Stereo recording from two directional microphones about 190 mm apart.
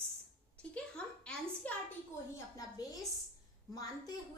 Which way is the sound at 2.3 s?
20° left (ahead or behind).